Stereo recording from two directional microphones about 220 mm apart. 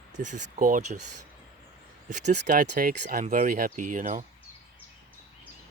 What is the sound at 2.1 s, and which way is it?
Speech, 35° right (ahead or behind).